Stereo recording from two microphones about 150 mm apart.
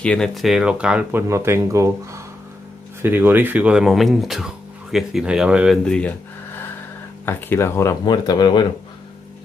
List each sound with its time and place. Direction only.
0.0 s speech: 5° left (ahead or behind)
5.9 s a sound: 10° left (ahead or behind)
7.2 s speech: 15° left (ahead or behind)
8.0 s speech: 30° left (ahead or behind)